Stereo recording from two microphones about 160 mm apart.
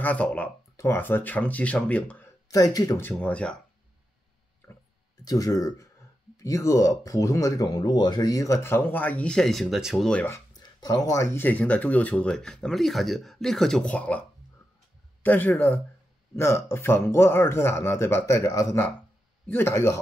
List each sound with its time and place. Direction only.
0.0 s speech: 10° left (ahead or behind)
2.4 s speech: 20° left (ahead or behind)
5.2 s speech: 20° left (ahead or behind)
10.6 s speech: 25° left (ahead or behind); by 14.2 s 10° left (ahead or behind)
15.2 s speech: 10° left (ahead or behind)